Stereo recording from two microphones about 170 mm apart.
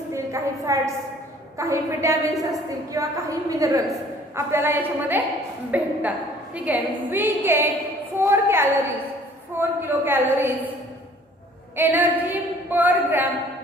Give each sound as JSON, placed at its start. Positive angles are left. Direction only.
{"t": 0.1, "sound": "a sound", "side_deg": -15}
{"t": 1.5, "sound": "a woman's voice", "side_deg": -15}
{"t": 11.8, "sound": "a woman's voice", "side_deg": -10}